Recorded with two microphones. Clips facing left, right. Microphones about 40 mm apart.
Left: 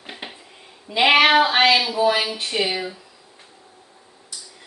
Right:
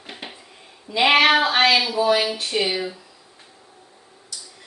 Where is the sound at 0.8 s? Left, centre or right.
Centre.